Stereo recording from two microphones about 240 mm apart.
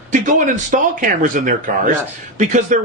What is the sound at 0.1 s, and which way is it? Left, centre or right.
Speech, right.